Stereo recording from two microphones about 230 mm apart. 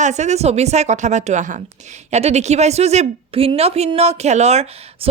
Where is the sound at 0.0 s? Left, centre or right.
Right.